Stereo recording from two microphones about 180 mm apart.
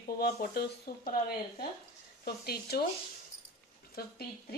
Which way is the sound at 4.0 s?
60° left (ahead or behind).